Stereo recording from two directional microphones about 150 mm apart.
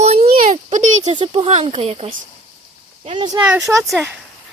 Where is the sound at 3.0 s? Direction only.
30° right (ahead or behind).